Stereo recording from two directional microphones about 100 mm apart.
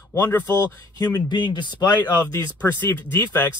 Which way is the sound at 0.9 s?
40° left (ahead or behind).